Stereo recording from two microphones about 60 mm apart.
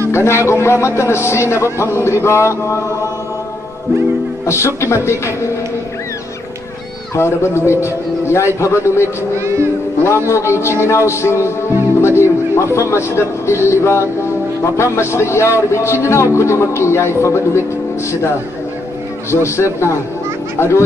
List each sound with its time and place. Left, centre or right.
0.1 s speech: left
4.5 s speech: left
7.2 s speech: left
10.0 s speech: left
19.3 s speech: left